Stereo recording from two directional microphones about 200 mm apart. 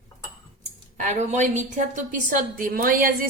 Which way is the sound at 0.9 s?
35° right (ahead or behind).